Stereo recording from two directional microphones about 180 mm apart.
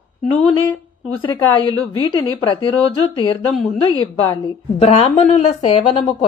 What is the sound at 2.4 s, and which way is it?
Speech, 30° left (ahead or behind).